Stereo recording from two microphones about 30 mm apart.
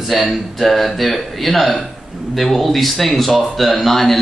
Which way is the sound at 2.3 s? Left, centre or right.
Centre.